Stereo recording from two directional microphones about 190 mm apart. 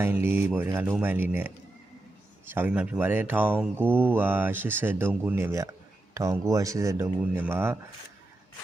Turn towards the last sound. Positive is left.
turn(degrees=-10)  # may be behind; listen again after turning